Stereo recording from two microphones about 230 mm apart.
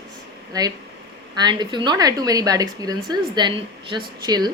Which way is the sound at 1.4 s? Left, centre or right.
Centre.